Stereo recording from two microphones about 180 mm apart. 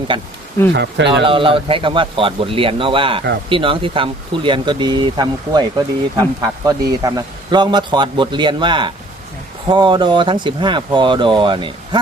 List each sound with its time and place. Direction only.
0.1 s speech: 30° right (ahead or behind)
0.7 s speech: 75° right (ahead or behind)
1.2 s speech: 30° right (ahead or behind)